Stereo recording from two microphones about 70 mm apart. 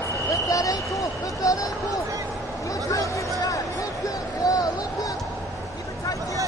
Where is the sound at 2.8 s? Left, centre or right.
Left.